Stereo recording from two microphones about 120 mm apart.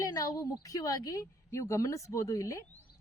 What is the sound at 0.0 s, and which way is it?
A woman's voice, 30° left (ahead or behind).